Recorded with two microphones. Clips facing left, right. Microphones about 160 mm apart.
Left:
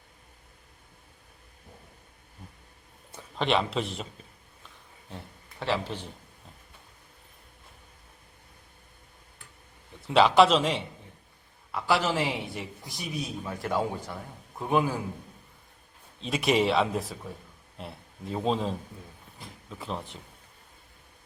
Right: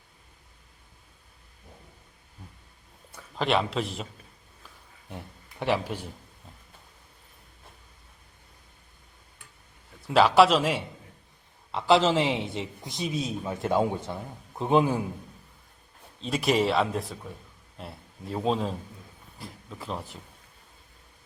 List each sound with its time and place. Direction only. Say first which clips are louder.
3.3 s a man's voice: right 1 dB; centre (ahead or behind)
5.0 s a sound: right 2 dB; 15° right (ahead or behind)
10.1 s a man's voice: right 1 dB; 5° right (ahead or behind)
11.7 s a man's voice: right 5 dB; 20° right (ahead or behind)
16.2 s a man's voice: even; centre (ahead or behind)